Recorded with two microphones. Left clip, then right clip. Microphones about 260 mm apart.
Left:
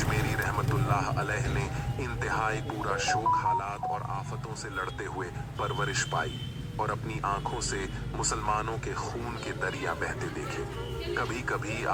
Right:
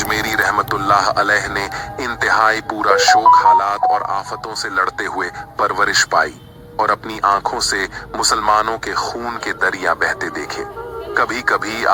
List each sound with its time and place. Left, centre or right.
0.1 s a man's voice: right